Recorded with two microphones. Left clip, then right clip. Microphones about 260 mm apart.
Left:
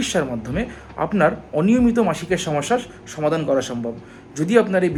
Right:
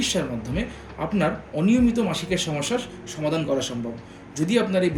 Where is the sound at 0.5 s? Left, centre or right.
Centre.